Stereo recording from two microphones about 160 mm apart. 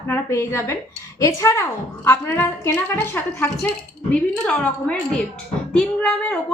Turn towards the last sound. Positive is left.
turn(degrees=5)  # may be behind; listen again after turning